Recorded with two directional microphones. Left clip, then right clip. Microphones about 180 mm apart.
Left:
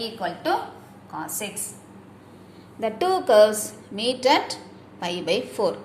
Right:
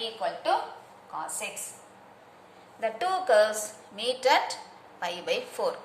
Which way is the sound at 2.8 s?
20° left (ahead or behind).